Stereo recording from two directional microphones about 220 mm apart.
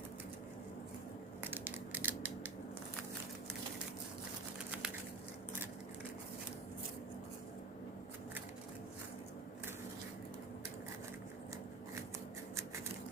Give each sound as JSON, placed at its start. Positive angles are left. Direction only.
{"t": 1.5, "sound": "crushing", "side_deg": -10}